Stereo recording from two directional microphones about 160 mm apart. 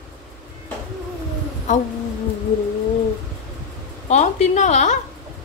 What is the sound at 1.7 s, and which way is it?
Speech, 50° left (ahead or behind).